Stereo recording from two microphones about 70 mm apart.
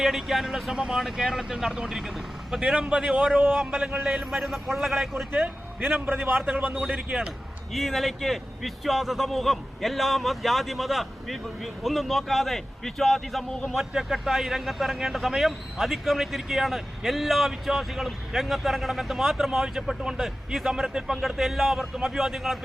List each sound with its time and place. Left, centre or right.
0.0 s a man's voice: centre
3.3 s a man's voice: right
4.4 s a man's voice: centre
5.8 s a man's voice: right
6.9 s speech: centre
7.7 s a man's voice: centre